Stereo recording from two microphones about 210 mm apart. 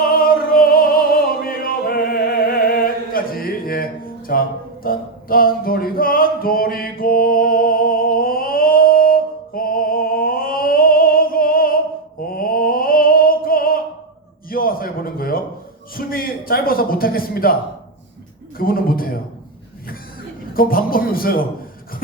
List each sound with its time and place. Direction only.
0.0 s music: 45° left (ahead or behind)
1.5 s a sound: 45° left (ahead or behind)
18.5 s a man's voice: 45° left (ahead or behind)
20.5 s speech: 45° left (ahead or behind)